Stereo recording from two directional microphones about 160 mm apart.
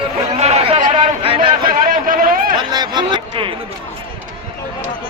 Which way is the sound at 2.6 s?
25° right (ahead or behind).